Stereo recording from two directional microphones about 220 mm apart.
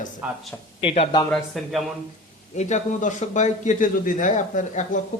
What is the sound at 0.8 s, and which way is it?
Speech, 25° left (ahead or behind).